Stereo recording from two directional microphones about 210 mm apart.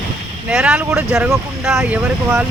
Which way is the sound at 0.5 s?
5° right (ahead or behind).